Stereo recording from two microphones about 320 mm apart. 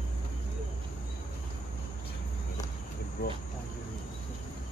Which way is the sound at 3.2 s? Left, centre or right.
Left.